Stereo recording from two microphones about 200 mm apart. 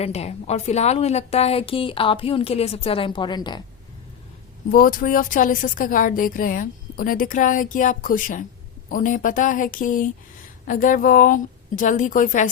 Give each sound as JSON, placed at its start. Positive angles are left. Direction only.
{"t": 0.0, "sound": "a woman's voice", "side_deg": 30}
{"t": 4.7, "sound": "a woman's voice", "side_deg": 45}